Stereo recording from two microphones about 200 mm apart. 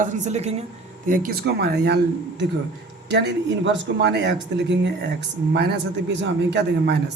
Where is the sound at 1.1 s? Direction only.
50° right (ahead or behind).